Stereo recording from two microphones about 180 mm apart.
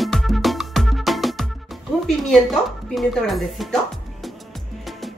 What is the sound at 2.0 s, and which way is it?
Speech, centre (ahead or behind).